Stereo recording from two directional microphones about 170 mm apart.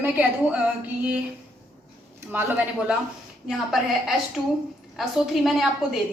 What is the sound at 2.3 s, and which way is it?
A woman's voice, 10° right (ahead or behind).